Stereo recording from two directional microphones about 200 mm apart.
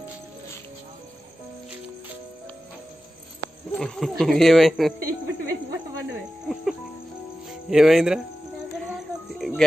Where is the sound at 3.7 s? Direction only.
5° left (ahead or behind).